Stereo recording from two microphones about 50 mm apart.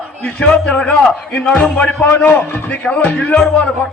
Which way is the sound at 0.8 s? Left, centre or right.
Centre.